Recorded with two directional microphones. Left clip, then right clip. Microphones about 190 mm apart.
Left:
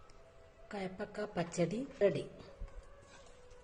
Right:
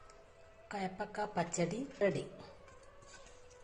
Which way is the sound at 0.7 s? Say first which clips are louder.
Right 2 dB; 40° left (ahead or behind).